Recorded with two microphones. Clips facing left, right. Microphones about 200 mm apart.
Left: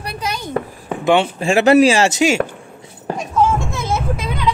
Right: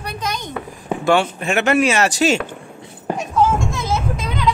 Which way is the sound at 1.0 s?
20° left (ahead or behind).